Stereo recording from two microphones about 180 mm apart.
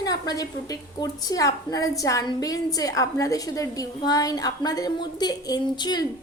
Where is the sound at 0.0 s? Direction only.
20° left (ahead or behind).